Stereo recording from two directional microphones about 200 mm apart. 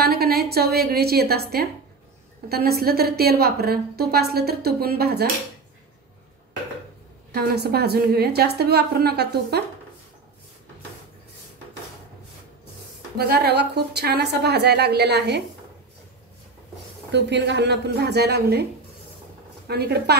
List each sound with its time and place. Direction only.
0.0 s a woman's voice: 50° right (ahead or behind)
7.3 s a woman's voice: 55° right (ahead or behind)
13.2 s a woman's voice: 50° right (ahead or behind)
17.1 s a woman's voice: 60° right (ahead or behind)
19.7 s a woman's voice: 55° right (ahead or behind)